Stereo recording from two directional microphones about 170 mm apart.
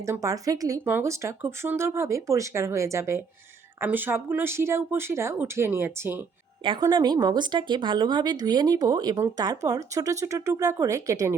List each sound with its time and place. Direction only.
0.0 s speech: 20° right (ahead or behind)
6.7 s speech: 25° right (ahead or behind)